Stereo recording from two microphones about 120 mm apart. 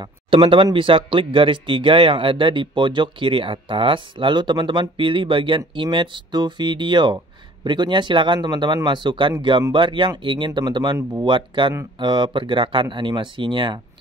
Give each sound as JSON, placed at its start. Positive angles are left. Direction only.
{"t": 0.4, "sound": "speech", "side_deg": -45}